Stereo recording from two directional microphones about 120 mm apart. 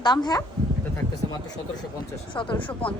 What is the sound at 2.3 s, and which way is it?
Speech, 45° left (ahead or behind).